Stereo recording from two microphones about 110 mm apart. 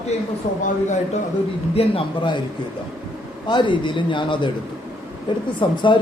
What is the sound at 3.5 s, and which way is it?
Speech, 45° left (ahead or behind).